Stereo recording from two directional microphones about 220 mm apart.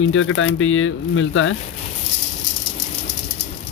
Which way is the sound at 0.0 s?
65° left (ahead or behind).